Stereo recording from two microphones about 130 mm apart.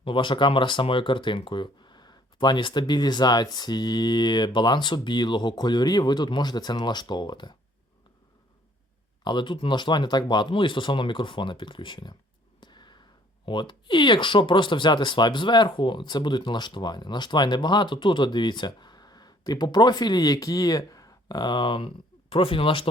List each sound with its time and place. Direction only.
0.0 s speech: 40° left (ahead or behind)
9.2 s speech: 35° left (ahead or behind)
12.5 s a sound: 35° left (ahead or behind)
13.4 s speech: 35° left (ahead or behind)